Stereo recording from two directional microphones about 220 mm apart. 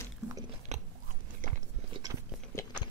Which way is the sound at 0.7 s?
30° right (ahead or behind).